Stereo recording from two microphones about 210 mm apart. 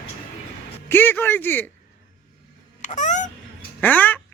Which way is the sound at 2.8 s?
35° left (ahead or behind).